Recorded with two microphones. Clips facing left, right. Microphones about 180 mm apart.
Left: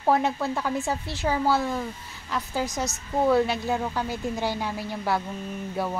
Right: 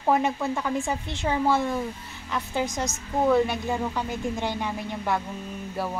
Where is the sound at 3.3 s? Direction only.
10° left (ahead or behind).